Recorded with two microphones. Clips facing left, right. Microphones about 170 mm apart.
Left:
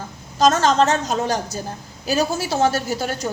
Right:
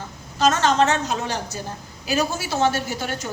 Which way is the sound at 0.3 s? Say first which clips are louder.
Left 2 dB; 40° left (ahead or behind).